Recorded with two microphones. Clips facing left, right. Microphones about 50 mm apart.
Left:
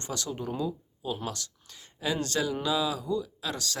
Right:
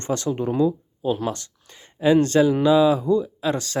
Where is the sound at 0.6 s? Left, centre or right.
Right.